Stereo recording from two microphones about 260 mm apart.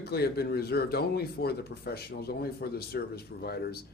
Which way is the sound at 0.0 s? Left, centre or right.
Left.